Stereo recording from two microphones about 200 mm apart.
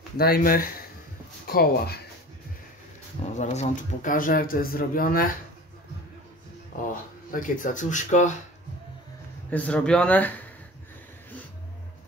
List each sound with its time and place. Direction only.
0.2 s speech: 50° left (ahead or behind)
3.3 s speech: 40° left (ahead or behind)
6.9 s speech: 40° left (ahead or behind)
9.5 s speech: 5° left (ahead or behind)